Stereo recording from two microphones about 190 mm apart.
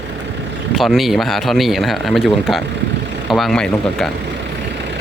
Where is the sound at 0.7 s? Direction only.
Centre (ahead or behind).